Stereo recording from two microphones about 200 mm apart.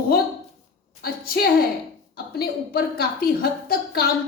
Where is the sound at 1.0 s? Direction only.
50° left (ahead or behind).